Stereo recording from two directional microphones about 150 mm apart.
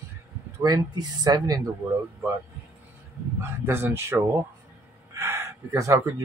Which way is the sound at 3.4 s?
15° right (ahead or behind).